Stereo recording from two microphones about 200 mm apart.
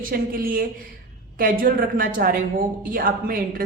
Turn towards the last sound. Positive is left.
turn(degrees=-45)  # may be behind; listen again after turning